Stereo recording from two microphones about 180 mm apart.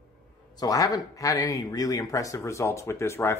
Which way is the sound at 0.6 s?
20° left (ahead or behind).